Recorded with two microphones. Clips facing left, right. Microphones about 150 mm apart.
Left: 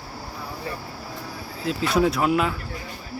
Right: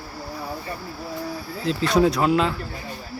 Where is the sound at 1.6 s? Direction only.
5° left (ahead or behind).